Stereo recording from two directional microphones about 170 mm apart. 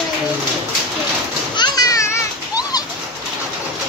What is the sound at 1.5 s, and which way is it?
Children playing, 25° left (ahead or behind).